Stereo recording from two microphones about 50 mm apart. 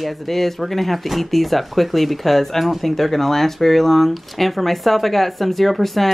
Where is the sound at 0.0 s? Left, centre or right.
Centre.